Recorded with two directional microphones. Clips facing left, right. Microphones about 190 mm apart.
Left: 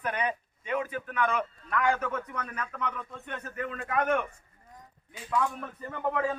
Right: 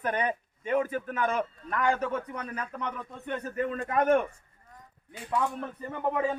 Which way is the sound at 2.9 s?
20° right (ahead or behind).